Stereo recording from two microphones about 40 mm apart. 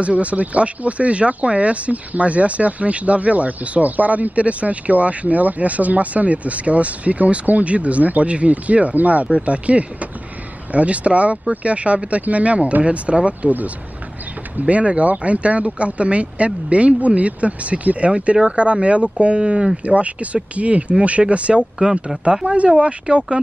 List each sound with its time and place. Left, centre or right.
0.0 s speech: right
14.6 s speech: right